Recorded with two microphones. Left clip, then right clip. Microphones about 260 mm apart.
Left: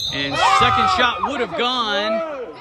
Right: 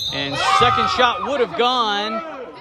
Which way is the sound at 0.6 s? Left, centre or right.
Centre.